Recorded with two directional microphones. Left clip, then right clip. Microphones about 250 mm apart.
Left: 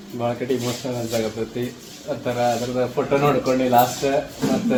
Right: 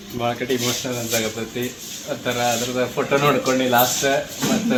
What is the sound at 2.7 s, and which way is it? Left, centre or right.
Speech, centre.